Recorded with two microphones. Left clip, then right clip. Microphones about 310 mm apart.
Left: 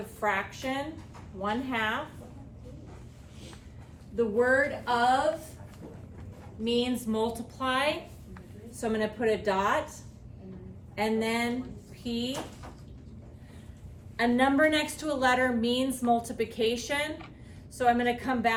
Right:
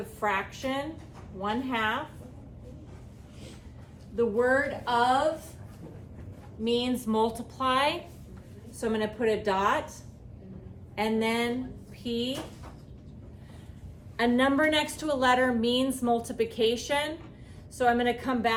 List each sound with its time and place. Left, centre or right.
0.2 s a woman's voice: centre
4.1 s a woman's voice: centre
6.7 s a woman's voice: centre
10.9 s a woman's voice: centre
14.2 s a woman's voice: centre